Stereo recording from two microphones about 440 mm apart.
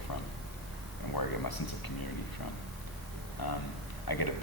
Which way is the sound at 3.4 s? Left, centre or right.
Left.